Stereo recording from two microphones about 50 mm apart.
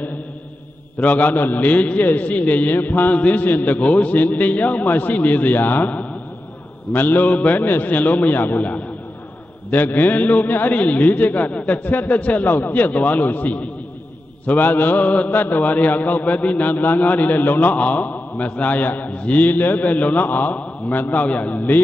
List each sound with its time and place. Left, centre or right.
1.0 s mantra: left
6.9 s mantra: left